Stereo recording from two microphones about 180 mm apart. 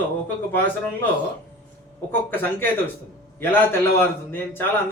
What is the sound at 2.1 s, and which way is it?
A man's voice, 10° left (ahead or behind).